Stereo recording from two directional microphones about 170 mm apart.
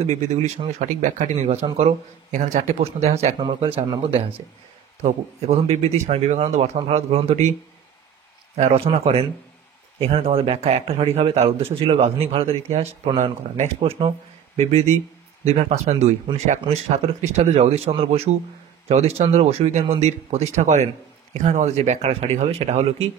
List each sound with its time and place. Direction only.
0.0 s speech: 40° right (ahead or behind)
5.8 s speech: 40° right (ahead or behind)
8.5 s speech: 35° right (ahead or behind)